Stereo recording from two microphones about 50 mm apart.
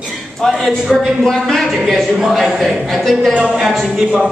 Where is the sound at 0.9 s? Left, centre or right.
Centre.